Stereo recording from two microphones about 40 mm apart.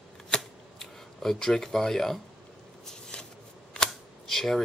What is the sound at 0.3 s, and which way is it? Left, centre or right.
Camera, centre.